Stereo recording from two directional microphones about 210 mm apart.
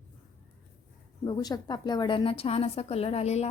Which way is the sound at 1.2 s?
20° left (ahead or behind).